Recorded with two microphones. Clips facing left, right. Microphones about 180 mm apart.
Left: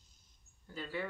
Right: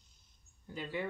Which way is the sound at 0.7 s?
15° right (ahead or behind).